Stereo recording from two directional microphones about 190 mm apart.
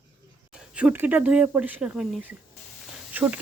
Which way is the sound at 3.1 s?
10° right (ahead or behind).